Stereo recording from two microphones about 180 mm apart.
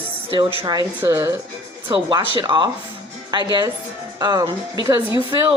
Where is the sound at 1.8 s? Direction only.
25° right (ahead or behind).